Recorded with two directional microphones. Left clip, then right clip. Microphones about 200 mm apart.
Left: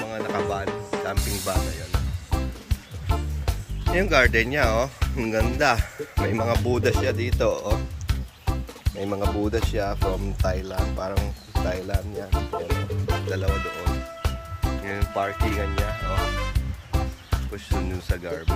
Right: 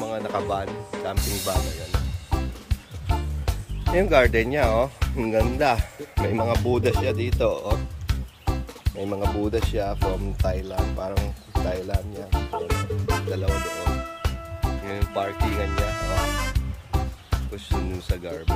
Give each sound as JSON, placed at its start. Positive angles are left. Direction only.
{"t": 0.0, "sound": "speech", "side_deg": -15}
{"t": 1.1, "sound": "music", "side_deg": 0}
{"t": 3.9, "sound": "speech", "side_deg": -15}
{"t": 5.1, "sound": "music", "side_deg": -15}
{"t": 5.6, "sound": "speech", "side_deg": -10}
{"t": 6.5, "sound": "speech", "side_deg": 0}
{"t": 16.5, "sound": "music", "side_deg": 0}